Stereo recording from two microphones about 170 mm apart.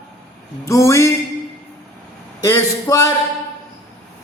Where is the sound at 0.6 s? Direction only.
15° left (ahead or behind).